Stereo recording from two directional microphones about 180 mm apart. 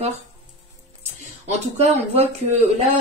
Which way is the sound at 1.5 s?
40° right (ahead or behind).